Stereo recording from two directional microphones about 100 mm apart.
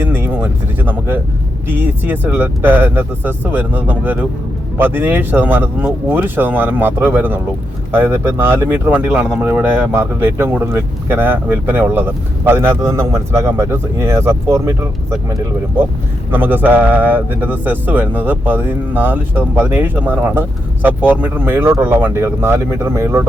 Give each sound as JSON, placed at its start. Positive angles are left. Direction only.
{"t": 0.0, "sound": "a sound", "side_deg": -20}
{"t": 1.6, "sound": "speech", "side_deg": -20}
{"t": 16.3, "sound": "speech", "side_deg": -20}